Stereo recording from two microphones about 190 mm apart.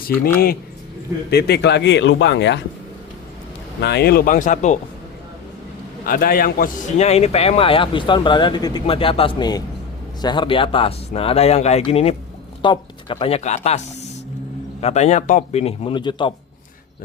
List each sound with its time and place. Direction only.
1.3 s speech: 60° left (ahead or behind)
3.8 s speech: 60° left (ahead or behind); by 4.8 s 40° left (ahead or behind)
6.1 s a man's voice: 50° left (ahead or behind); by 13.6 s 35° left (ahead or behind)
14.8 s a man's voice: 35° left (ahead or behind)